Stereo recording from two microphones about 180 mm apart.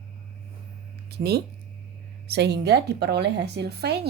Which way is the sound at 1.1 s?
60° right (ahead or behind).